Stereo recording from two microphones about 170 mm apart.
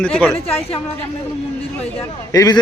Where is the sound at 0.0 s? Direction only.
5° left (ahead or behind).